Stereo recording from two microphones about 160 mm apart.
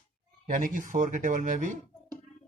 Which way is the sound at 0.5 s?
55° right (ahead or behind).